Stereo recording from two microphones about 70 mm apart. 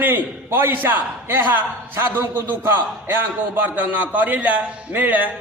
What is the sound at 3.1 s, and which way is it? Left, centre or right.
A man's voice, right.